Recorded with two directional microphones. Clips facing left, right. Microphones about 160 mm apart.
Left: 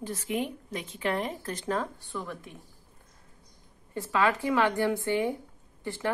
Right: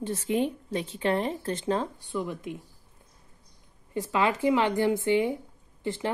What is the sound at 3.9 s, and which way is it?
A woman's voice, 15° right (ahead or behind).